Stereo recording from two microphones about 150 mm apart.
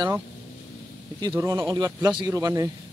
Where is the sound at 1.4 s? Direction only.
20° right (ahead or behind).